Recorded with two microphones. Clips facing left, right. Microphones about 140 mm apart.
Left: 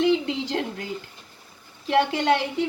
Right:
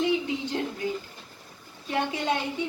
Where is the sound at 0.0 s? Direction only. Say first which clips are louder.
Left 4 dB; 80° left.